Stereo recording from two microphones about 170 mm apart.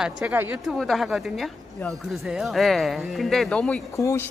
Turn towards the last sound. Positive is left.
turn(degrees=15)  # may be behind; listen again after turning